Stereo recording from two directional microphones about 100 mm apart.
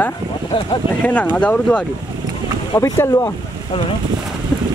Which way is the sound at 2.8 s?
30° left (ahead or behind).